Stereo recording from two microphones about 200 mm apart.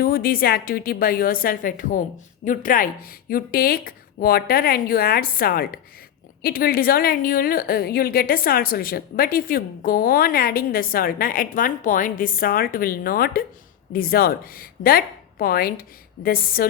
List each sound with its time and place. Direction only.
0.0 s a woman's voice: 50° left (ahead or behind)